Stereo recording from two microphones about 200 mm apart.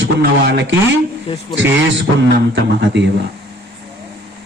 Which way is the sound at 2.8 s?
60° right (ahead or behind).